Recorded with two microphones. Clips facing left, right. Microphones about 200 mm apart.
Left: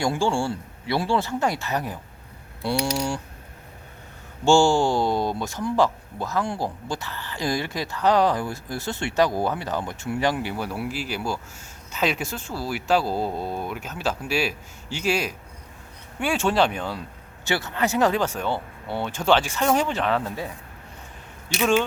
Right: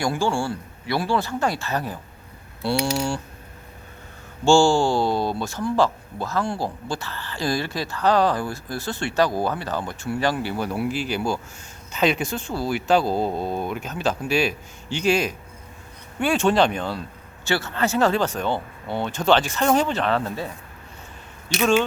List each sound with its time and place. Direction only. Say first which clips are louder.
0.0 s speech: even; 25° left (ahead or behind)
4.4 s speech: right 1 dB; 20° left (ahead or behind)